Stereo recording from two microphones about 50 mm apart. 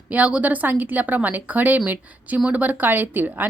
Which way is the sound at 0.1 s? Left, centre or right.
Right.